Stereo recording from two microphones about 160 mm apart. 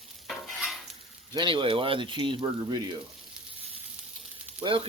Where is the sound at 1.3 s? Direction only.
30° right (ahead or behind).